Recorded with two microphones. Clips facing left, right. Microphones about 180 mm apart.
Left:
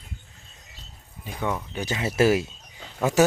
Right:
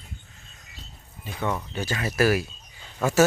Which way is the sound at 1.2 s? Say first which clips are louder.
Even; 15° left (ahead or behind).